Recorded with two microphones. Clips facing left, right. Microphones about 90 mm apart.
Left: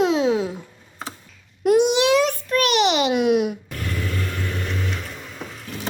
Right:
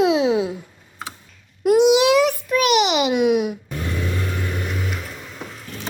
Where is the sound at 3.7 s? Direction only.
20° right (ahead or behind).